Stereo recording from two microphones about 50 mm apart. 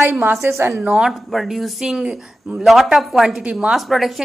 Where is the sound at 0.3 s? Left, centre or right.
Right.